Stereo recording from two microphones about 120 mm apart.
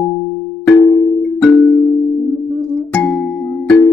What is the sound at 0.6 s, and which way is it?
Music, 10° left (ahead or behind).